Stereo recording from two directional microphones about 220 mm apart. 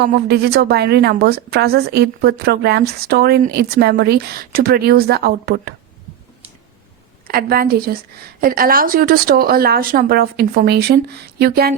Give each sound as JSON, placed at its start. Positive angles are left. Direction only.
{"t": 0.0, "sound": "a woman's voice", "side_deg": -45}
{"t": 7.3, "sound": "a woman's voice", "side_deg": -40}